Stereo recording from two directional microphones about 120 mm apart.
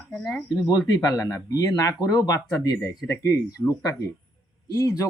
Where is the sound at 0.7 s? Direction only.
35° left (ahead or behind).